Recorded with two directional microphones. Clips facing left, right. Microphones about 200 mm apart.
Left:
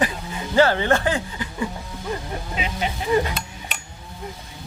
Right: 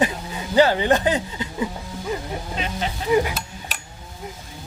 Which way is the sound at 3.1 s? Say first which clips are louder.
Right 2 dB; 10° right (ahead or behind).